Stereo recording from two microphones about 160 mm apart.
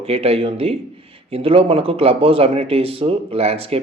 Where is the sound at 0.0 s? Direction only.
40° right (ahead or behind).